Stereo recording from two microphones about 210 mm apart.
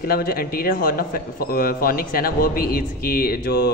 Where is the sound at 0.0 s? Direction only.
45° left (ahead or behind).